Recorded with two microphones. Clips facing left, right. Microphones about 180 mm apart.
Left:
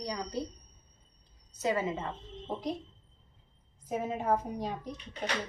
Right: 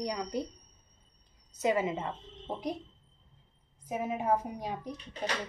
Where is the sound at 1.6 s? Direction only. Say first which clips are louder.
Right 2 dB; 20° right (ahead or behind).